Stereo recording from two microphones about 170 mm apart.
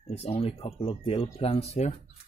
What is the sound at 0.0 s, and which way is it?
Speech, 35° left (ahead or behind).